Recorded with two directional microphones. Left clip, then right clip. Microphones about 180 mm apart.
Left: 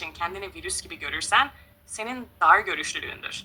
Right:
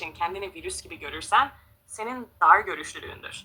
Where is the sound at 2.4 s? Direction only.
50° left (ahead or behind).